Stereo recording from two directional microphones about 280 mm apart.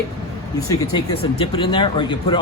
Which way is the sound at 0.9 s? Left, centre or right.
Centre.